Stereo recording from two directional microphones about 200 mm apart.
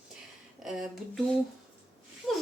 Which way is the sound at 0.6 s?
Centre (ahead or behind).